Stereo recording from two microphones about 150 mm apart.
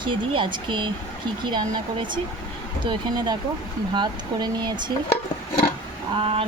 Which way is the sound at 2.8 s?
30° right (ahead or behind).